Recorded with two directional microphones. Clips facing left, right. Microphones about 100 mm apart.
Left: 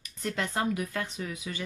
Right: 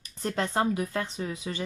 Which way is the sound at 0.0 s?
35° right (ahead or behind).